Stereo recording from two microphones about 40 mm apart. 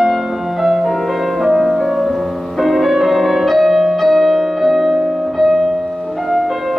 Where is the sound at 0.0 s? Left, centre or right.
Centre.